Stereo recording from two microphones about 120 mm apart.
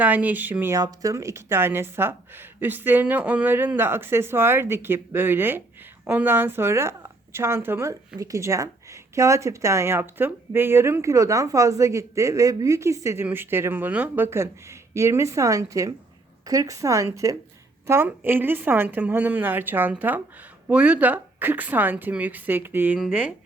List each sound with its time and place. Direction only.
0.0 s speech: 15° right (ahead or behind)
0.8 s a woman's voice: 30° right (ahead or behind); by 23.3 s 10° right (ahead or behind)